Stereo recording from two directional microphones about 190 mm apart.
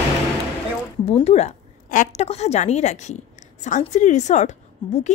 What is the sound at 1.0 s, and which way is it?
A woman's voice, 35° left (ahead or behind).